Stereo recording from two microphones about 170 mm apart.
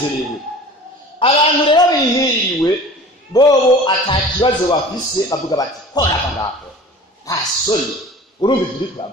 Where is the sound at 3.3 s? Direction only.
30° left (ahead or behind).